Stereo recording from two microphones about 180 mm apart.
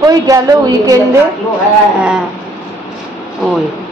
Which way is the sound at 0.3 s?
20° right (ahead or behind).